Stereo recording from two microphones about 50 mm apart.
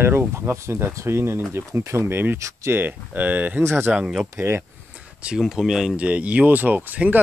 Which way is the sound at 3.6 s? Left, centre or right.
Right.